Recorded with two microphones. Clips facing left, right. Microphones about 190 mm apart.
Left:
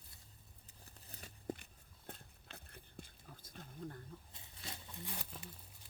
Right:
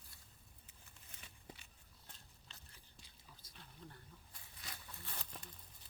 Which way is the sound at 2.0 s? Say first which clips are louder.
Left 11 dB; 55° left (ahead or behind).